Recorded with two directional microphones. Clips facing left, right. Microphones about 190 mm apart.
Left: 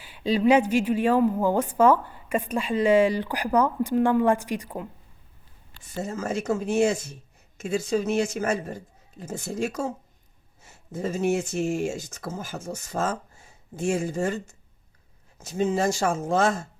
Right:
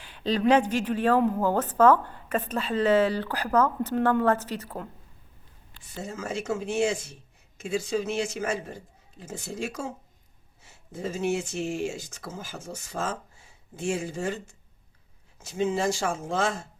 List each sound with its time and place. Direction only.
0.0 s a woman's voice: 10° left (ahead or behind)
5.9 s speech: 45° left (ahead or behind)